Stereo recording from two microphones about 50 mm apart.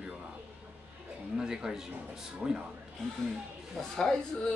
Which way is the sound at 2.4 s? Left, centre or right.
Right.